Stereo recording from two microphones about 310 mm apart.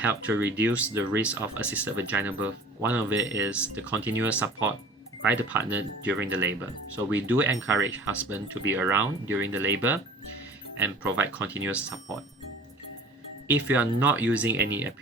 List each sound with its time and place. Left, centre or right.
0.0 s speech: centre
13.5 s speech: centre